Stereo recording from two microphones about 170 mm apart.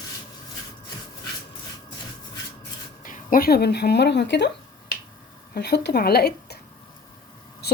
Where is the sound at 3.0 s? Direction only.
50° left (ahead or behind); by 4.4 s 90° left.